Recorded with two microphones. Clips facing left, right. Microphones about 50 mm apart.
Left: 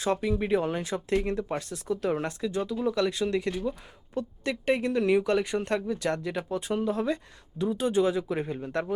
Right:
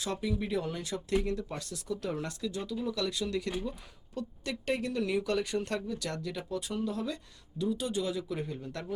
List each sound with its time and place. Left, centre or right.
0.0 s speech: left